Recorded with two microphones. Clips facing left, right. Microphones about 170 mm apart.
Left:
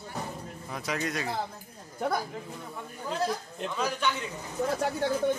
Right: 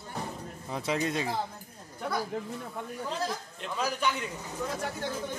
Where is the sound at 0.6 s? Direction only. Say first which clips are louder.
Right 3 dB; 25° right (ahead or behind).